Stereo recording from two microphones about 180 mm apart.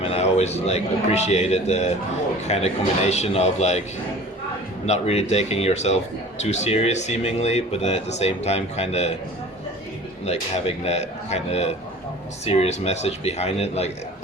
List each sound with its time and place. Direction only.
0.0 s a man's voice: 35° left (ahead or behind)
4.9 s speech: 40° left (ahead or behind)
10.2 s speech: 35° left (ahead or behind)